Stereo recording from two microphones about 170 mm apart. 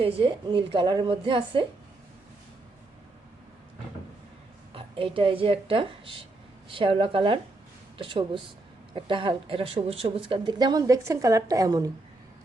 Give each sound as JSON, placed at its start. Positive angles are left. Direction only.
{"t": 0.0, "sound": "a woman's voice", "side_deg": -30}
{"t": 4.7, "sound": "a woman's voice", "side_deg": -30}